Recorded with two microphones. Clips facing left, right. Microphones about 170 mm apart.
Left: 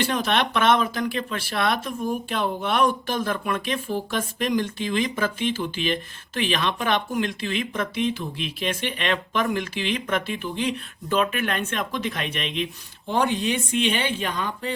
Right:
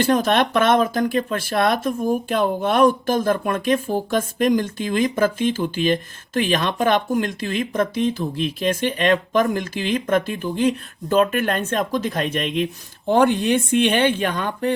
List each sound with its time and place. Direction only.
0.0 s speech: 45° right (ahead or behind)